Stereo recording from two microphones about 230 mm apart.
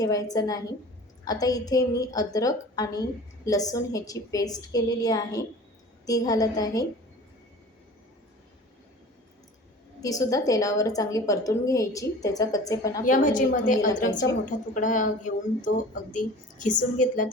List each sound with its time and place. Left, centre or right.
0.0 s a woman's voice: centre
10.0 s a woman's voice: centre
13.1 s speech: left